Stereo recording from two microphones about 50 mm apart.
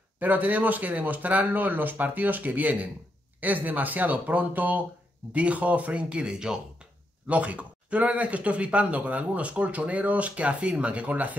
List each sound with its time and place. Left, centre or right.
0.2 s speech: right; by 6.9 s centre
7.2 s speech: right